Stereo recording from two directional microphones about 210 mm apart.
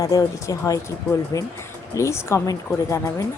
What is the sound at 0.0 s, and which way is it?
Speech, 15° left (ahead or behind).